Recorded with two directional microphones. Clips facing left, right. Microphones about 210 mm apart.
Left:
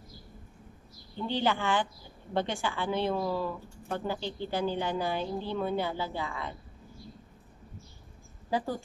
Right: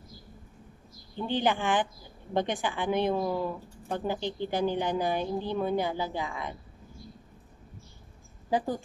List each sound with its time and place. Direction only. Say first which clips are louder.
1.1 s speech: right 2 dB; 15° right (ahead or behind)
8.5 s speech: right 3 dB; 15° right (ahead or behind)